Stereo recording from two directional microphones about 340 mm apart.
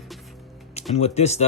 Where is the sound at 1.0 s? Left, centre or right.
Centre.